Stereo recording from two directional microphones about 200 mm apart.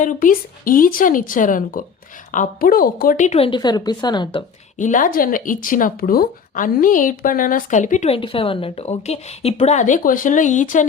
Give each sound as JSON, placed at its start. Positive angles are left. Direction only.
{"t": 0.0, "sound": "a woman's voice", "side_deg": 40}
{"t": 4.8, "sound": "speech", "side_deg": 40}